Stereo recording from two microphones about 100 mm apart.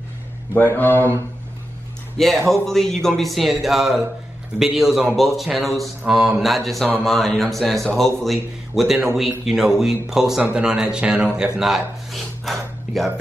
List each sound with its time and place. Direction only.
0.6 s speech: 20° left (ahead or behind)
2.2 s mantra: 5° left (ahead or behind)
10.4 s speech: 10° right (ahead or behind)